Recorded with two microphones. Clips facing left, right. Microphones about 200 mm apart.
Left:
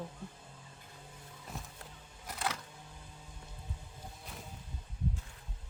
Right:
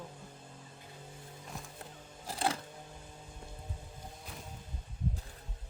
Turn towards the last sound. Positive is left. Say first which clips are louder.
# even
turn(degrees=0)  # may be behind; listen again after turning